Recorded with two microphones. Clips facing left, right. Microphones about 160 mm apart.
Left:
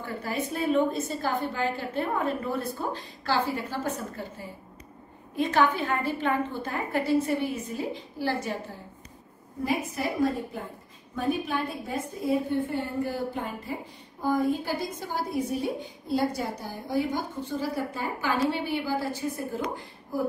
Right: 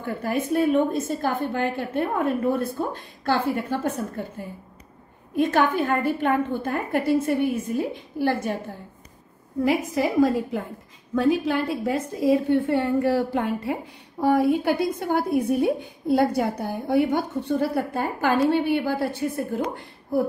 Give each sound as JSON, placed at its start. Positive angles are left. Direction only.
{"t": 0.0, "sound": "a woman's voice", "side_deg": -50}
{"t": 9.7, "sound": "a woman's voice", "side_deg": -90}